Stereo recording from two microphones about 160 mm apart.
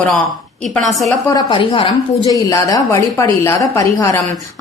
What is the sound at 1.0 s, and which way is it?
Speech, 20° left (ahead or behind).